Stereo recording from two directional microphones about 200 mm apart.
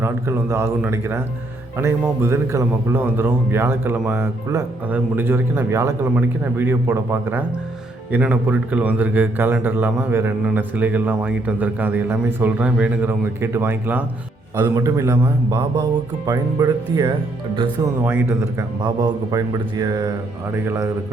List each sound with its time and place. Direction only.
0.0 s a man's voice: 10° right (ahead or behind)